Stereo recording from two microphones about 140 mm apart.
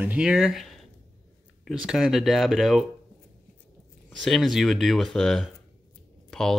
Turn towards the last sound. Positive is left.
turn(degrees=5)  # may be behind; listen again after turning